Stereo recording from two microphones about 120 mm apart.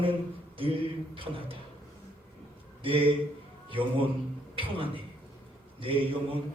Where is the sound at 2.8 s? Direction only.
45° right (ahead or behind).